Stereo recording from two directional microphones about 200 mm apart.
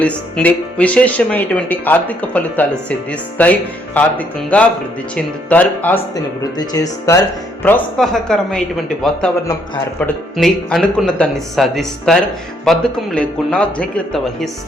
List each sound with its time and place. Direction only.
0.0 s speech: 5° left (ahead or behind)
10.3 s speech: centre (ahead or behind)